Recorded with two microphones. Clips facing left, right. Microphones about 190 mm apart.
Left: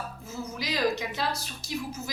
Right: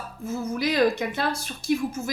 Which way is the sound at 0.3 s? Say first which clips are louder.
Right 9 dB; 55° right (ahead or behind).